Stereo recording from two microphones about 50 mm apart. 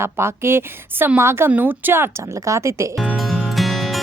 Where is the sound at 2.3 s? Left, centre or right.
Right.